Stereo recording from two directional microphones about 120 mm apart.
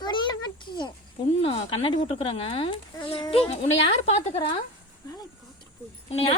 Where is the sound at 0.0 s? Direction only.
40° left (ahead or behind).